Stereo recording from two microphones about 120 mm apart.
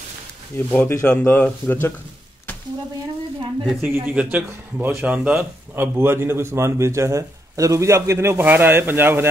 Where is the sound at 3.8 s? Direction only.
20° right (ahead or behind).